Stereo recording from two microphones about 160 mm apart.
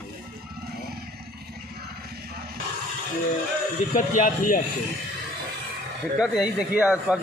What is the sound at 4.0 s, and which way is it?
Speech, 55° left (ahead or behind).